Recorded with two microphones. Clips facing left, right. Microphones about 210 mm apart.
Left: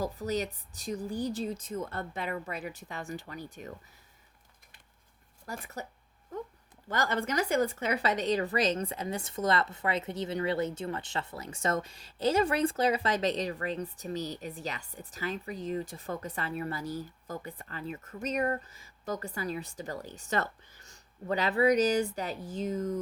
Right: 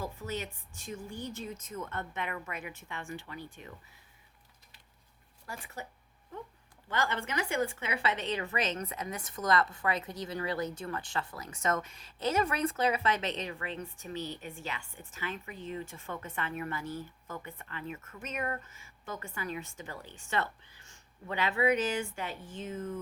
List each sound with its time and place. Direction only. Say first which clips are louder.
0.0 s a woman's voice: left 6 dB; 40° left (ahead or behind)
5.5 s a woman's voice: left 4 dB; 40° left (ahead or behind)
6.8 s a woman's voice: left 3 dB; 40° left (ahead or behind)